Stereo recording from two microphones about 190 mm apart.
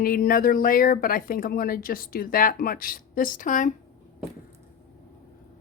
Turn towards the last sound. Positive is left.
turn(degrees=40)  # may be behind; listen again after turning